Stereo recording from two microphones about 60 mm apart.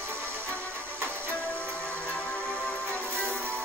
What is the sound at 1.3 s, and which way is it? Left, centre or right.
Music, left.